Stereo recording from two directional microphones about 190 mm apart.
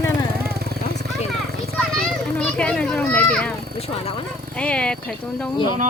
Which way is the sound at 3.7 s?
35° left (ahead or behind).